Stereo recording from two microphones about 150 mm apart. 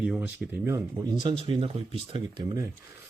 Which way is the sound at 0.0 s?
5° right (ahead or behind).